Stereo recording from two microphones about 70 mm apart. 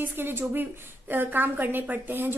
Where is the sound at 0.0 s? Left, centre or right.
Right.